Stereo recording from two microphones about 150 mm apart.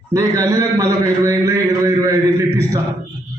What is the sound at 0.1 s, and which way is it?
Speech, 20° right (ahead or behind).